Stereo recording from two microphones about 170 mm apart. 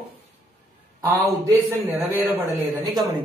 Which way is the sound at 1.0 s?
10° right (ahead or behind).